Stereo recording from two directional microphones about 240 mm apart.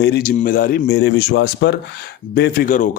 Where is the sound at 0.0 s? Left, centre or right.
Left.